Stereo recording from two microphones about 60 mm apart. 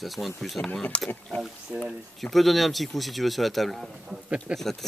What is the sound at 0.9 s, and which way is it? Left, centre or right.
Speech, centre.